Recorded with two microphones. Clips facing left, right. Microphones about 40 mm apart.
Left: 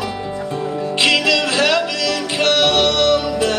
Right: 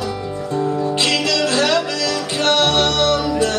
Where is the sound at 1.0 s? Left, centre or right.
Left.